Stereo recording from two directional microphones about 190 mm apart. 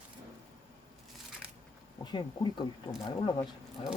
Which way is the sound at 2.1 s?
25° left (ahead or behind).